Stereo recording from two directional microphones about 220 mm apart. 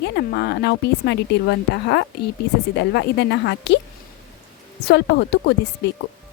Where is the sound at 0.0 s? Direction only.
50° left (ahead or behind).